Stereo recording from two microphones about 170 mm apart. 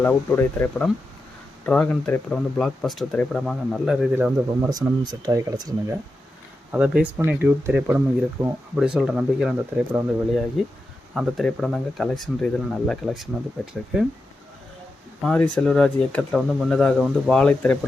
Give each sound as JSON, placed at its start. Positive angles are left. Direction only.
{"t": 0.0, "sound": "speech", "side_deg": 10}
{"t": 4.1, "sound": "speech", "side_deg": -15}
{"t": 6.7, "sound": "speech", "side_deg": -5}
{"t": 15.2, "sound": "speech", "side_deg": 5}